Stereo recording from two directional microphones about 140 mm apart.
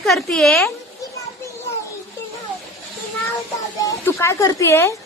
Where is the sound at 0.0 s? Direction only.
Centre (ahead or behind).